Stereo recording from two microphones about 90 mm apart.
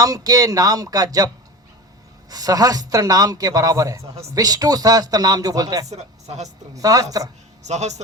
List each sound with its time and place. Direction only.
0.0 s a man's voice: 40° right (ahead or behind)
2.3 s a man's voice: 45° right (ahead or behind)